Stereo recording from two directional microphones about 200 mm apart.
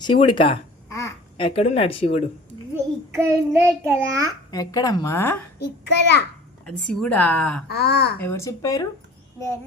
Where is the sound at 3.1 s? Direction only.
15° right (ahead or behind).